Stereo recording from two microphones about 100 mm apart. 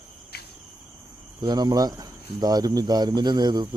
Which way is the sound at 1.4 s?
45° right (ahead or behind).